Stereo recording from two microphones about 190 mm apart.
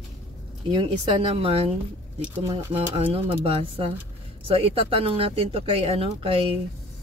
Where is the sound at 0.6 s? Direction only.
25° right (ahead or behind).